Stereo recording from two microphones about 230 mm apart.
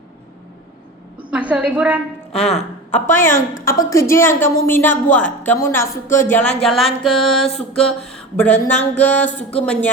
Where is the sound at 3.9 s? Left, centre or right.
Centre.